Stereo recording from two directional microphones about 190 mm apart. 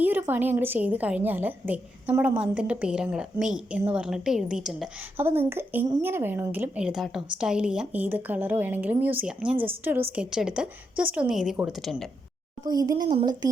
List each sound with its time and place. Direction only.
0.0 s a woman's voice: 10° right (ahead or behind)
12.6 s speech: 20° right (ahead or behind)